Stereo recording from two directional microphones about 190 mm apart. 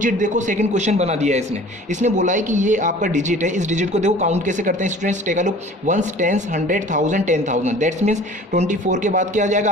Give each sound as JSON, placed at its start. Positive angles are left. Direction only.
{"t": 0.0, "sound": "speech", "side_deg": -40}